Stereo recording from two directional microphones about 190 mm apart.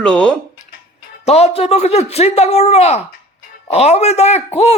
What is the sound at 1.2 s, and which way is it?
Speech, 35° left (ahead or behind).